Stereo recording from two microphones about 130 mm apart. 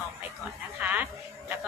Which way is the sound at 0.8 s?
10° right (ahead or behind).